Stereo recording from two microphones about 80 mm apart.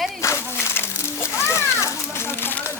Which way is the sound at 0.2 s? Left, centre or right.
Left.